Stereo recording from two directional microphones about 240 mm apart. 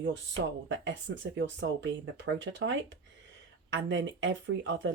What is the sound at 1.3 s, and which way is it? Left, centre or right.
Speech, right.